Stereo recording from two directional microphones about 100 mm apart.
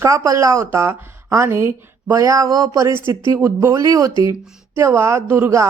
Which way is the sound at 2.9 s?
25° right (ahead or behind).